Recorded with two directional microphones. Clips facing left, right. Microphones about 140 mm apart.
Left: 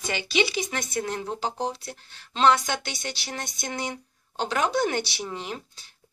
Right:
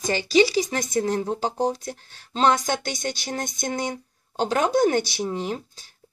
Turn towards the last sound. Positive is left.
turn(degrees=-40)  # may be behind; listen again after turning